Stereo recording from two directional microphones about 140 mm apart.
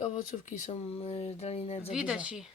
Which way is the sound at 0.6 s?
45° left (ahead or behind).